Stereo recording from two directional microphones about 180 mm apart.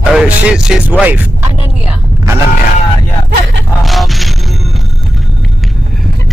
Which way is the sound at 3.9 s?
Centre (ahead or behind).